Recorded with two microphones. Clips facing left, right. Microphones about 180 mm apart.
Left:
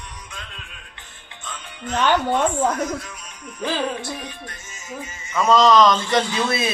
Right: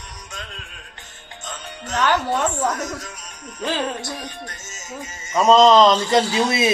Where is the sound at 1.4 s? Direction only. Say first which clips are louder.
Even; 40° right (ahead or behind).